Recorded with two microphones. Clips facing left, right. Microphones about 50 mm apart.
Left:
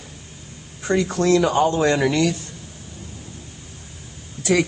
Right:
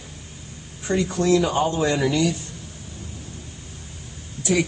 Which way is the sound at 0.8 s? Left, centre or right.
Left.